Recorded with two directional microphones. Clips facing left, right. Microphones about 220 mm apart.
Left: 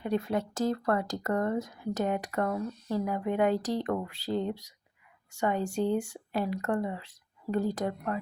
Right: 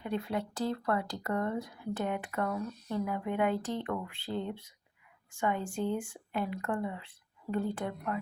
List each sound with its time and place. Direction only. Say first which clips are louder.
0.0 s speech: left 4 dB; 45° left (ahead or behind)